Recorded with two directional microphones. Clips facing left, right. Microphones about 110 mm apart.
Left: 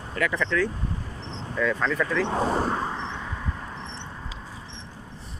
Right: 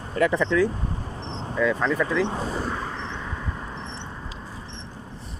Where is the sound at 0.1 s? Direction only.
30° right (ahead or behind).